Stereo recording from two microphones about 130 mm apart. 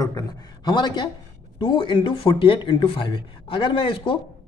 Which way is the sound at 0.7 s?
35° left (ahead or behind).